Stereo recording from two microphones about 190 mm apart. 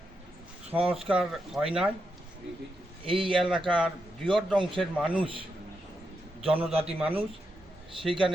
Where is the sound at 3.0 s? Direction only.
25° right (ahead or behind).